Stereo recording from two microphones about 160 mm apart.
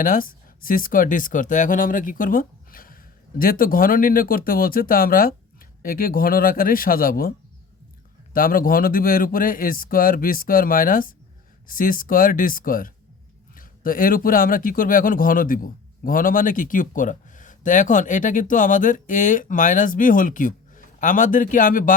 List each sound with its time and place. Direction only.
0.0 s a man's voice: 60° left (ahead or behind)